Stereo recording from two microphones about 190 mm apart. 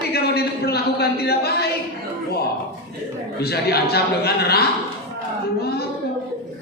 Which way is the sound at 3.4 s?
55° left (ahead or behind).